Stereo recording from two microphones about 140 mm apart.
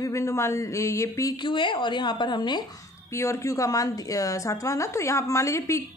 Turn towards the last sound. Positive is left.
turn(degrees=20)  # may be behind; listen again after turning